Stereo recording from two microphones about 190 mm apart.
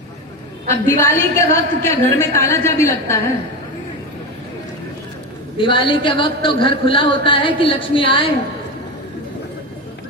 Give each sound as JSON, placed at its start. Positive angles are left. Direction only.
{"t": 0.9, "sound": "a woman's voice", "side_deg": 10}
{"t": 5.5, "sound": "a man's voice", "side_deg": 25}